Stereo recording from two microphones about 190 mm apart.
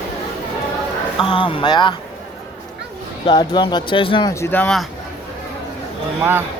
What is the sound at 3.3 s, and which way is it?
Speech, 25° left (ahead or behind).